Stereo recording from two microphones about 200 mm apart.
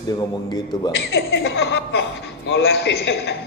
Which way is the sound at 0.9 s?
55° left (ahead or behind).